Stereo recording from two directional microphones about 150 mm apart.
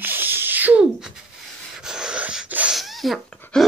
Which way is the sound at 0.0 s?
15° right (ahead or behind).